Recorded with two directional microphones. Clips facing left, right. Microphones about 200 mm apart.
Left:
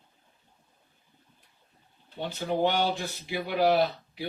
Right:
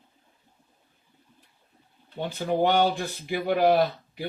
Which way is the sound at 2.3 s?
50° right (ahead or behind).